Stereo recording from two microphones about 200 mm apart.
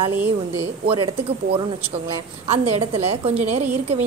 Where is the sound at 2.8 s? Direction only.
30° right (ahead or behind).